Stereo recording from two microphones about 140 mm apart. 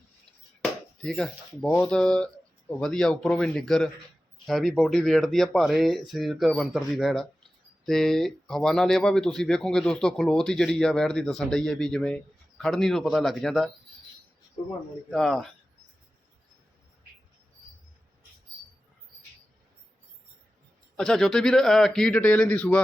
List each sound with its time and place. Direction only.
0.6 s chop: 5° left (ahead or behind)
1.6 s speech: 15° left (ahead or behind)
1.9 s speech: 5° left (ahead or behind)
15.1 s speech: centre (ahead or behind)
20.9 s speech: 5° left (ahead or behind)